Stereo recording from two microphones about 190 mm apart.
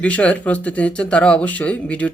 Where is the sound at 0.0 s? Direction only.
5° left (ahead or behind).